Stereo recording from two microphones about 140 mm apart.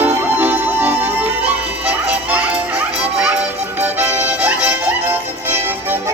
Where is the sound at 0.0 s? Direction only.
15° right (ahead or behind).